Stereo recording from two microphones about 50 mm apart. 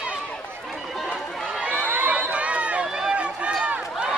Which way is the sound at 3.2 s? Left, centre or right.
Right.